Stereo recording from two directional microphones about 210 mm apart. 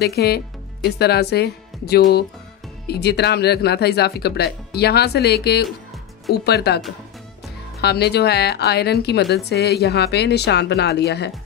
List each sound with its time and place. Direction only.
0.0 s a woman's voice: 50° left (ahead or behind)
7.8 s a woman's voice: 50° left (ahead or behind)